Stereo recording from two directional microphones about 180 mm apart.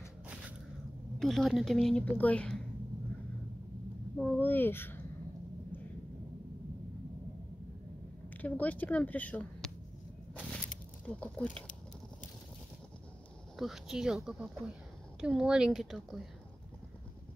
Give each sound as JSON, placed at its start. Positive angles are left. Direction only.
{"t": 1.2, "sound": "a woman's voice", "side_deg": 0}
{"t": 4.2, "sound": "speech", "side_deg": 5}
{"t": 8.3, "sound": "speech", "side_deg": 10}
{"t": 11.1, "sound": "a woman's voice", "side_deg": 5}
{"t": 13.6, "sound": "a woman's voice", "side_deg": 0}